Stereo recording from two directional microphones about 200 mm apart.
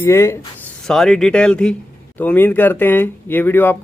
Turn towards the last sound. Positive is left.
turn(degrees=10)  # may be behind; listen again after turning